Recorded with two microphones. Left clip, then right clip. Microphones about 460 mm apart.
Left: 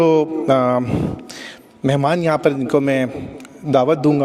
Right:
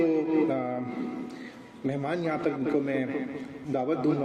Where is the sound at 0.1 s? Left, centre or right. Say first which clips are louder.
Left 11 dB; left.